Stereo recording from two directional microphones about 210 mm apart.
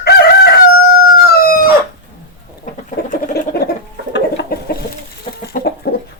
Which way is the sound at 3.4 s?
50° left (ahead or behind).